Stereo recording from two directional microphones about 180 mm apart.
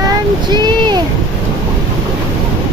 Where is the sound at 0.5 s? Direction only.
25° right (ahead or behind).